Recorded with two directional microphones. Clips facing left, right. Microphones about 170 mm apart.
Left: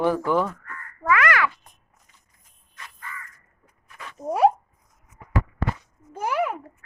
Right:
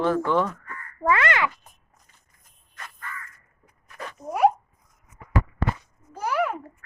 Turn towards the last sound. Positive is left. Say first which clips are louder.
# even
turn(degrees=20)  # may be behind; listen again after turning